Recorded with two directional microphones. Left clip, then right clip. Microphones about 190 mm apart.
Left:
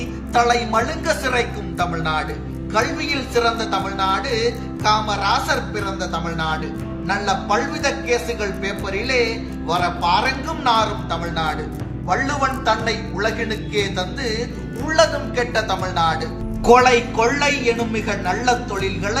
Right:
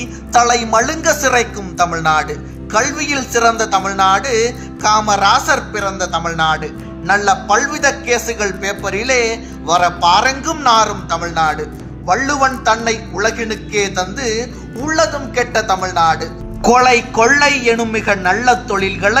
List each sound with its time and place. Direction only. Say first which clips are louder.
0.3 s a man's voice: right 5 dB; 50° right (ahead or behind)